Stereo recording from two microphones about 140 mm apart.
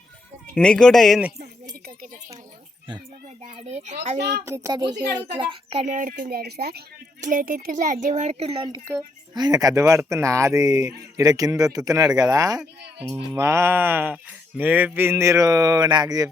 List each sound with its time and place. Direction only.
0.5 s speech: 5° left (ahead or behind)
3.5 s a child's voice: 45° right (ahead or behind)
4.4 s a child's voice: 20° right (ahead or behind); by 5.8 s 35° right (ahead or behind)
5.8 s speech: 70° right (ahead or behind); by 8.6 s 45° right (ahead or behind)
8.9 s speech: 15° right (ahead or behind)
9.3 s speech: 30° right (ahead or behind)